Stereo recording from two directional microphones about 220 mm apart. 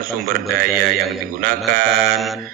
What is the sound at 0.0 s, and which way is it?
A man's voice, 40° right (ahead or behind).